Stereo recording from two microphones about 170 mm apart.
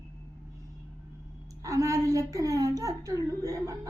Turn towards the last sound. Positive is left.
turn(degrees=-20)  # may be behind; listen again after turning